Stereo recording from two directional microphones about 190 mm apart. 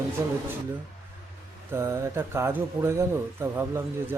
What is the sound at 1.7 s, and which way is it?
Speech, 15° right (ahead or behind).